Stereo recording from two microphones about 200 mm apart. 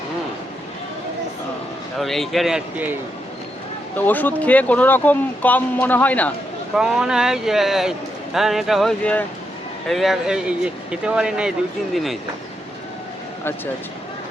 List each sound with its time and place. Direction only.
2.0 s a man's voice: centre (ahead or behind)
3.9 s speech: 10° left (ahead or behind)
6.7 s a man's voice: 5° right (ahead or behind)